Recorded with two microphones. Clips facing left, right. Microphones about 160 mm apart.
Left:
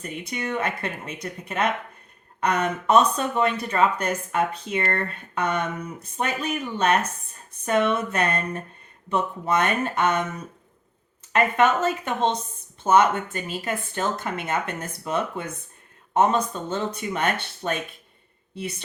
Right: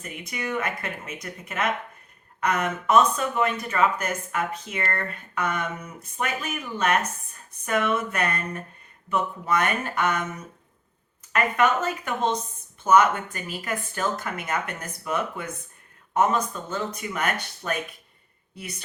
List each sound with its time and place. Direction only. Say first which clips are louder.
0.0 s speech: left 3 dB; 30° left (ahead or behind)
11.3 s a woman's voice: left 2 dB; 25° left (ahead or behind)